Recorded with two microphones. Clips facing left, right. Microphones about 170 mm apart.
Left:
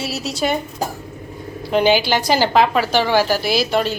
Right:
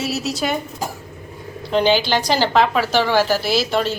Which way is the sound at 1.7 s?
10° left (ahead or behind).